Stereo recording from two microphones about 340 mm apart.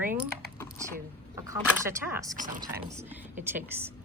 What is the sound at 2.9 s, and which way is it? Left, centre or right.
A woman's voice, centre.